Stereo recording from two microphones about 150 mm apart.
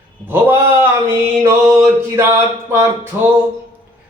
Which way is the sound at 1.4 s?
15° right (ahead or behind).